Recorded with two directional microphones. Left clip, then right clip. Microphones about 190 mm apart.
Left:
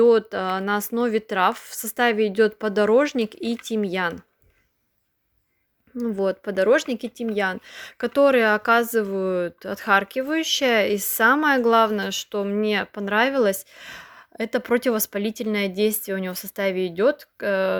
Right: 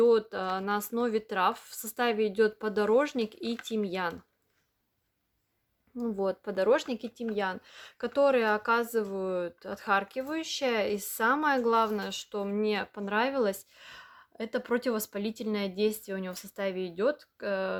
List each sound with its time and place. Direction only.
0.0 s speech: 30° left (ahead or behind)
6.0 s speech: 25° left (ahead or behind)